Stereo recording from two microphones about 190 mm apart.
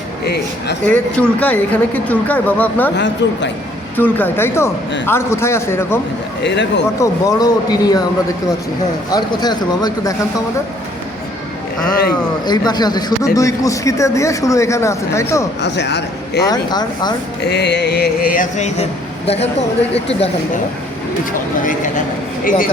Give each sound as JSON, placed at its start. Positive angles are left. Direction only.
{"t": 0.9, "sound": "a man's voice", "side_deg": 5}
{"t": 2.9, "sound": "speech", "side_deg": 70}
{"t": 3.9, "sound": "a man's voice", "side_deg": 10}
{"t": 6.4, "sound": "speech", "side_deg": 65}
{"t": 7.0, "sound": "speech", "side_deg": 20}
{"t": 9.1, "sound": "speech", "side_deg": 20}
{"t": 12.5, "sound": "a man's voice", "side_deg": 20}
{"t": 15.6, "sound": "a man's voice", "side_deg": 65}
{"t": 16.4, "sound": "speech", "side_deg": 20}
{"t": 17.5, "sound": "speech", "side_deg": 60}
{"t": 21.6, "sound": "speech", "side_deg": 45}